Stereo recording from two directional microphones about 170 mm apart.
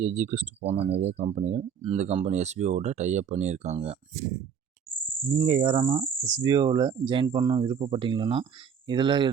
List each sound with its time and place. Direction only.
0.0 s speech: 45° right (ahead or behind)
5.3 s speech: 35° right (ahead or behind)